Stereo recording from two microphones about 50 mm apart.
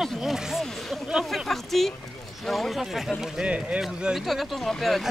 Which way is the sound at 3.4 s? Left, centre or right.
Right.